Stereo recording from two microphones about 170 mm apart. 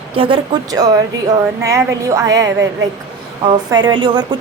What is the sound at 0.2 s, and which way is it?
A woman's voice, 25° right (ahead or behind).